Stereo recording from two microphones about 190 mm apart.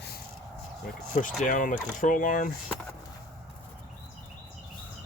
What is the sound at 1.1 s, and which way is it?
Speech, 45° left (ahead or behind).